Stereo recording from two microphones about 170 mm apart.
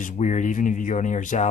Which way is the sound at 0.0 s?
45° left (ahead or behind).